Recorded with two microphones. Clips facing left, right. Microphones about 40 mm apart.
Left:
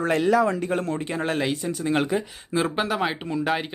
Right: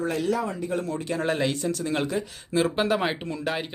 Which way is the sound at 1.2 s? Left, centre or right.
Centre.